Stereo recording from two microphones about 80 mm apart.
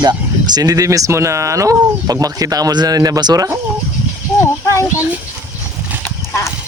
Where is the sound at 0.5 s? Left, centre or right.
Right.